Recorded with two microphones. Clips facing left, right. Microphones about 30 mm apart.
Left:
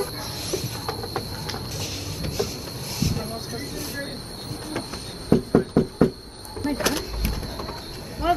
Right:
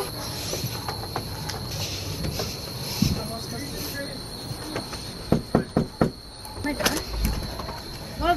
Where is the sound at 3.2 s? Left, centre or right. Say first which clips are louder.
Left 1 dB; centre.